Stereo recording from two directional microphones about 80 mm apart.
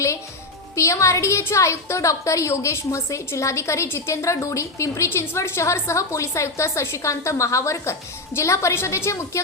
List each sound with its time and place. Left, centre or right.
0.8 s a woman's voice: left